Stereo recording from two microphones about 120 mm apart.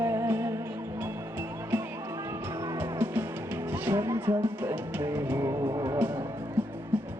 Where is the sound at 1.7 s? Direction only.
15° right (ahead or behind).